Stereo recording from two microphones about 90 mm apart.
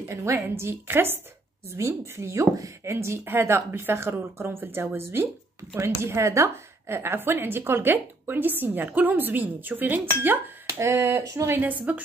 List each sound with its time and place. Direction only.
0.1 s a woman's voice: 30° right (ahead or behind)
10.8 s speech: 30° right (ahead or behind)
11.5 s a woman's voice: 20° right (ahead or behind)